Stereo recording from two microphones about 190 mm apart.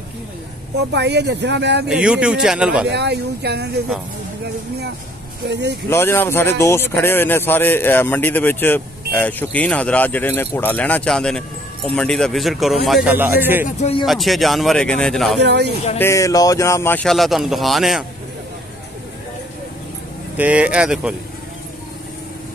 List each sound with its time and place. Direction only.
0.9 s speech: 65° right (ahead or behind)
1.9 s speech: 5° right (ahead or behind)
2.9 s speech: 60° right (ahead or behind)
5.5 s speech: 65° right (ahead or behind)
5.9 s speech: 10° left (ahead or behind); by 13.7 s 10° right (ahead or behind)
13.7 s speech: 35° left (ahead or behind)
14.0 s speech: centre (ahead or behind)
15.4 s speech: 65° right (ahead or behind)
16.0 s speech: 15° left (ahead or behind); by 18.0 s centre (ahead or behind)
20.3 s speech: 5° right (ahead or behind)